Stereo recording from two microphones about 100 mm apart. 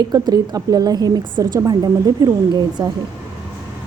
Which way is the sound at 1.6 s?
40° right (ahead or behind).